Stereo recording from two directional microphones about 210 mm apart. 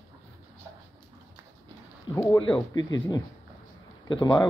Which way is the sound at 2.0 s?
15° left (ahead or behind).